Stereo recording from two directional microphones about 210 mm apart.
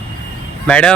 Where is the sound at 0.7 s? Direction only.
5° left (ahead or behind).